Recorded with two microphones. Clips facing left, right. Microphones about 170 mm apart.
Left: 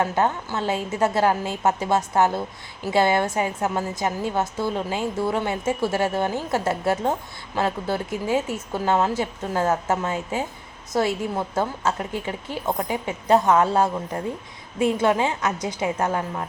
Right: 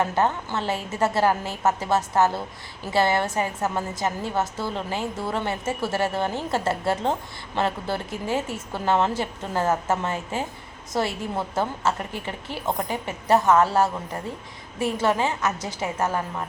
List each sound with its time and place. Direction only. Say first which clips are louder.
0.0 s a woman's voice: left 1 dB; 10° left (ahead or behind)
15.0 s a woman's voice: left 2 dB; 15° left (ahead or behind)